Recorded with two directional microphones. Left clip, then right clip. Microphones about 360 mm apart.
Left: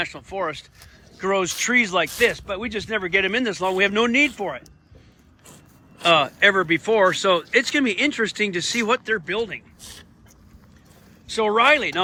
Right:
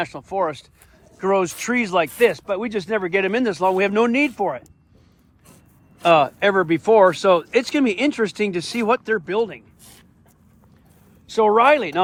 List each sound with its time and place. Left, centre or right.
0.0 s speech: centre
6.0 s speech: centre
9.8 s a sound: left
11.3 s speech: centre